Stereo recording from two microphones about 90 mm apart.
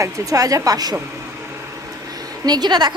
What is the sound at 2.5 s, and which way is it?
Speech, 50° right (ahead or behind).